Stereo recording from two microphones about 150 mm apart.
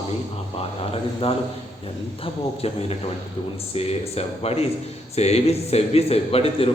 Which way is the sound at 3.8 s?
40° left (ahead or behind).